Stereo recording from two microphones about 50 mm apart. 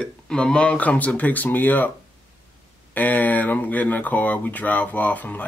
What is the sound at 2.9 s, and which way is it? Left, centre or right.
Speech, left.